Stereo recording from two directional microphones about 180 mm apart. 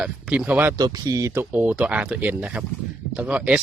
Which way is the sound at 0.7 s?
20° right (ahead or behind).